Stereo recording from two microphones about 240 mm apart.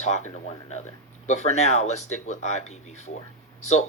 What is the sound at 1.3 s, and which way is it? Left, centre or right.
Speech, left.